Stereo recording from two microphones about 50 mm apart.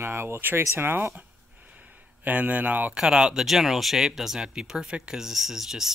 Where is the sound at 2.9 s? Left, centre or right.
Centre.